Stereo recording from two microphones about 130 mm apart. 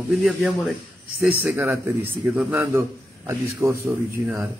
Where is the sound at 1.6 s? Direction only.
20° right (ahead or behind).